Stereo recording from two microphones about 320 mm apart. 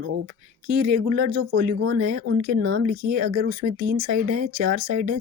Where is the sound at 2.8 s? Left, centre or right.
Right.